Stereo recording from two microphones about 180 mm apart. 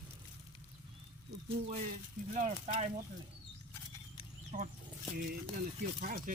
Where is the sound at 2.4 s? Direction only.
40° right (ahead or behind).